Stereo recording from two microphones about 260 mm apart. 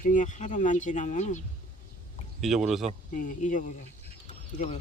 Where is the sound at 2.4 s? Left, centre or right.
Centre.